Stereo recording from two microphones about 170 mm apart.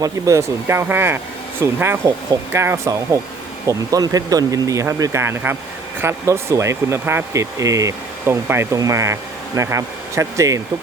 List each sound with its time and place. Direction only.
0.0 s speech: 20° right (ahead or behind)